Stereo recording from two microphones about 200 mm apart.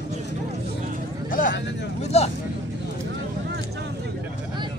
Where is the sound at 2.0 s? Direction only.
30° left (ahead or behind).